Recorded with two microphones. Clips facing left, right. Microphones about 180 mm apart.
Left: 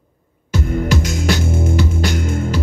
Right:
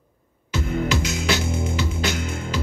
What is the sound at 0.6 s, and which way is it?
Music, 50° left (ahead or behind).